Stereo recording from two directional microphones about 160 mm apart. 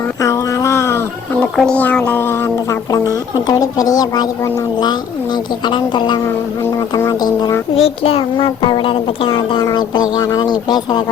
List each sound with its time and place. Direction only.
0.2 s a sound: 20° left (ahead or behind)
1.5 s speech: 5° left (ahead or behind); by 6.1 s 30° left (ahead or behind)
6.6 s speech: 20° left (ahead or behind)
7.8 s speech: 40° left (ahead or behind)